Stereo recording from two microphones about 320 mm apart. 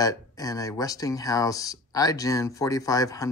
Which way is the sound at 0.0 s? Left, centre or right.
Centre.